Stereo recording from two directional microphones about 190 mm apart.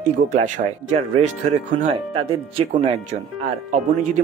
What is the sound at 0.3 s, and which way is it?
Speech, 40° right (ahead or behind).